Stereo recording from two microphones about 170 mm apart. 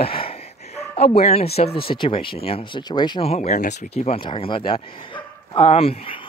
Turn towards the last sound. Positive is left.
turn(degrees=35)  # may be behind; listen again after turning